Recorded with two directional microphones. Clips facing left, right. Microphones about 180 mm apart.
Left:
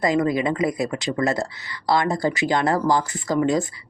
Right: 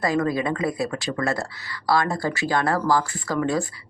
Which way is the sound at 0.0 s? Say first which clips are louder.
Left 2 dB; 20° left (ahead or behind).